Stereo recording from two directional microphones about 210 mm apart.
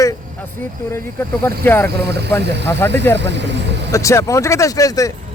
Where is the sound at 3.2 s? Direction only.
55° right (ahead or behind).